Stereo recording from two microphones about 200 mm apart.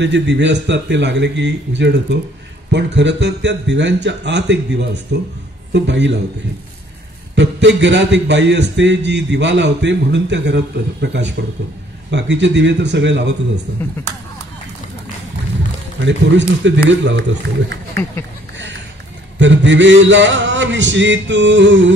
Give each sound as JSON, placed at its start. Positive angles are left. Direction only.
{"t": 0.0, "sound": "a man's voice", "side_deg": -60}
{"t": 7.3, "sound": "a man's voice", "side_deg": -60}
{"t": 16.0, "sound": "a man's voice", "side_deg": -65}
{"t": 19.3, "sound": "a man's voice", "side_deg": -65}